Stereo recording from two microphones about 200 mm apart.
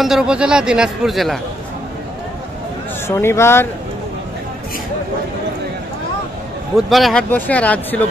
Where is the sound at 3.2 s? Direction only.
10° left (ahead or behind).